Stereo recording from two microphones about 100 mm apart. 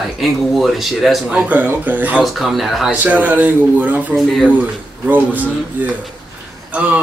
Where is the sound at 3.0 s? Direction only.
15° right (ahead or behind).